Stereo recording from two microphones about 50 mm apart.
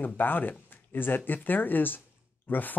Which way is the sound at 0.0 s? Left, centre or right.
Left.